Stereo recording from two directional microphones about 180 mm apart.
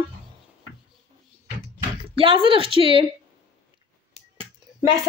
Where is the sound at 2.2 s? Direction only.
30° right (ahead or behind).